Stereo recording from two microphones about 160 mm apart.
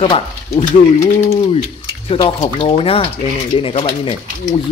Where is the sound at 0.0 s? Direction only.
35° left (ahead or behind).